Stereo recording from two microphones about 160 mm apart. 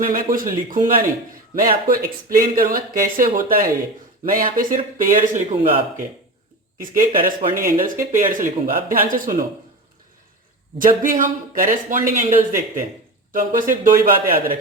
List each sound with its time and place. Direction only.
0.0 s a man's voice: 60° right (ahead or behind); by 5.8 s 45° right (ahead or behind)
7.1 s speech: 60° right (ahead or behind)
10.8 s speech: 55° right (ahead or behind)